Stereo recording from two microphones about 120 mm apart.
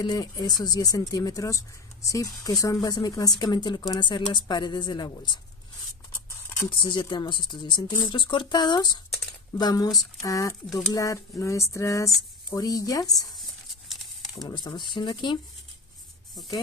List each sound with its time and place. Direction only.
0.0 s speech: 35° left (ahead or behind)
6.7 s speech: 40° left (ahead or behind)
14.4 s speech: 35° left (ahead or behind)